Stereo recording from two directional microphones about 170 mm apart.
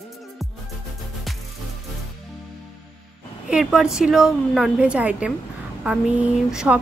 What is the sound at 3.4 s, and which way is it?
A woman's voice, 5° right (ahead or behind).